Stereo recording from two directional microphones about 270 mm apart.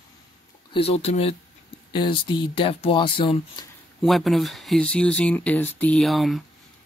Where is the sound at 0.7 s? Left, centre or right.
Left.